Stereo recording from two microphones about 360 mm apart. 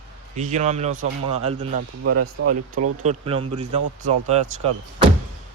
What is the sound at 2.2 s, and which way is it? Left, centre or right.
Speech, right.